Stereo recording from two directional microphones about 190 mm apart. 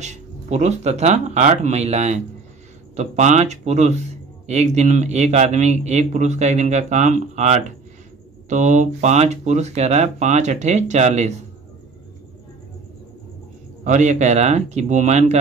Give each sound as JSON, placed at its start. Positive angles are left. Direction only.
{"t": 0.0, "sound": "a man's voice", "side_deg": -40}
{"t": 13.8, "sound": "a man's voice", "side_deg": -40}